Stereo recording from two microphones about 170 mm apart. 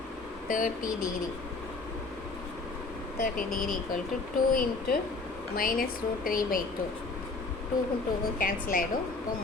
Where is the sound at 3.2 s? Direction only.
55° left (ahead or behind).